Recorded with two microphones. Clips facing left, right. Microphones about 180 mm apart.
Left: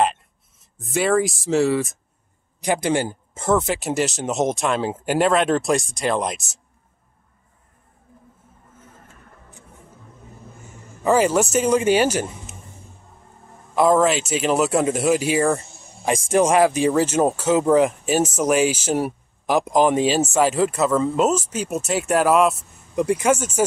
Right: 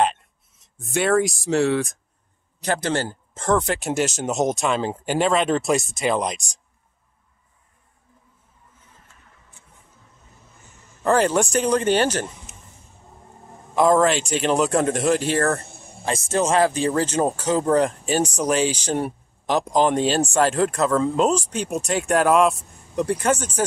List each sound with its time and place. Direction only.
0.0 s speech: centre (ahead or behind)
2.6 s speech: 15° left (ahead or behind)
8.7 s a sound: 50° left (ahead or behind)
11.0 s a man's voice: 5° left (ahead or behind)
13.7 s speech: 5° left (ahead or behind)
15.6 s a sound: 55° right (ahead or behind)
16.1 s a man's voice: 10° left (ahead or behind)